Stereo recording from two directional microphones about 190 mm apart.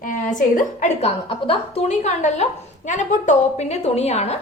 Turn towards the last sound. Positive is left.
turn(degrees=35)  # may be behind; listen again after turning